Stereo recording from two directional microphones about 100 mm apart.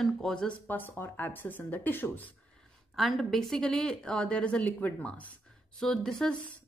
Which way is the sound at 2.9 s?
Centre (ahead or behind).